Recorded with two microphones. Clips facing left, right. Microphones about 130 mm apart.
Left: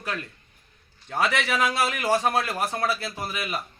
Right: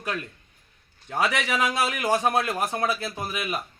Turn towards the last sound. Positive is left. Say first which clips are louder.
# right 1 dB
turn(degrees=-15)  # may be behind; listen again after turning